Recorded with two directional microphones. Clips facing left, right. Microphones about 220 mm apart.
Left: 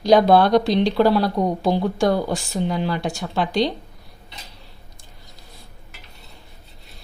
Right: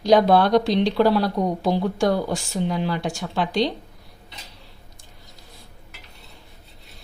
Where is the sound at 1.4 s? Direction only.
50° left (ahead or behind).